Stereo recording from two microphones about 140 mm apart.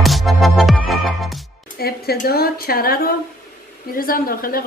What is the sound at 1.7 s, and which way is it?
A woman's voice, 90° left.